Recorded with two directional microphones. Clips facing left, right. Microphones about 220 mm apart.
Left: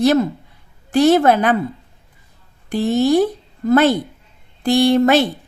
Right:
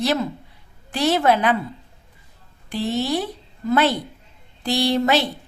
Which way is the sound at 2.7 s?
50° left (ahead or behind).